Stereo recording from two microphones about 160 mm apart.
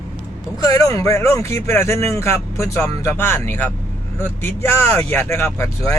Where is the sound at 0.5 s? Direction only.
25° left (ahead or behind).